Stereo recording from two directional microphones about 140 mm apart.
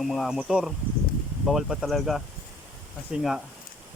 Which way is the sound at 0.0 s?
Centre (ahead or behind).